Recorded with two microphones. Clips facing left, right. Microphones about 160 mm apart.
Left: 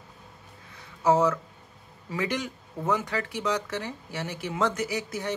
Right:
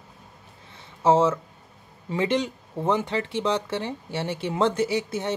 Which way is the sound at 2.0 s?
25° right (ahead or behind).